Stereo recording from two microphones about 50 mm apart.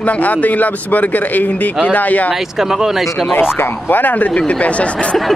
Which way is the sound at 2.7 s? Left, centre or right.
Centre.